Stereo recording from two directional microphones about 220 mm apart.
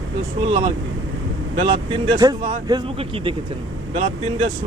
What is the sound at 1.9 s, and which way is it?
Speech, 20° right (ahead or behind).